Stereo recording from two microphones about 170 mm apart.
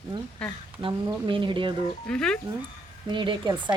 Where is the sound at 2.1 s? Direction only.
5° left (ahead or behind).